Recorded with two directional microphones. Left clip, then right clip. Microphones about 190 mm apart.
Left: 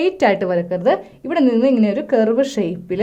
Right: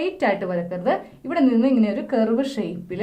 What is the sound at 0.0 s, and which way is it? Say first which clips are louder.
A woman's voice: left 6 dB; 55° left (ahead or behind).